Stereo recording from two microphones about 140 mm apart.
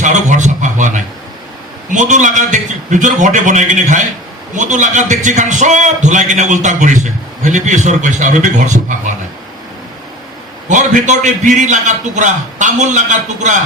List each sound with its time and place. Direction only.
0.0 s a sound: 60° right (ahead or behind)
1.9 s a man's voice: 60° right (ahead or behind)
10.7 s a man's voice: 60° right (ahead or behind)